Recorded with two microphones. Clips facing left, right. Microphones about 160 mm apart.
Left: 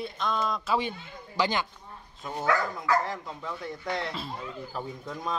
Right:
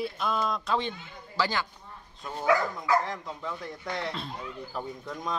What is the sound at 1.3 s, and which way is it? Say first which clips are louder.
Speech: left 2 dB; 20° left (ahead or behind).